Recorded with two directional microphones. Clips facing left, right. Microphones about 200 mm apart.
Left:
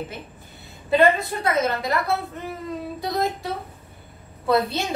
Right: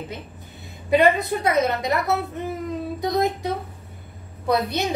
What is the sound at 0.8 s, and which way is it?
A woman's voice, 15° right (ahead or behind).